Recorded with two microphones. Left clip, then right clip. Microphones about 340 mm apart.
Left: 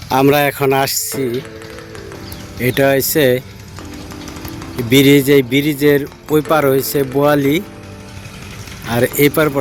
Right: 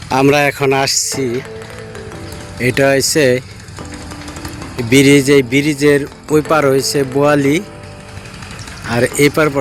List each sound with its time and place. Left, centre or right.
0.1 s a man's voice: left
2.6 s a man's voice: left
4.9 s a man's voice: left
8.9 s speech: left